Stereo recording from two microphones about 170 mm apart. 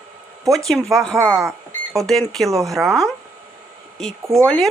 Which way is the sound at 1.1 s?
20° right (ahead or behind).